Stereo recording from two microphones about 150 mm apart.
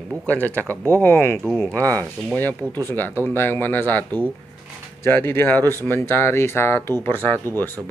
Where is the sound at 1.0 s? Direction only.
15° left (ahead or behind).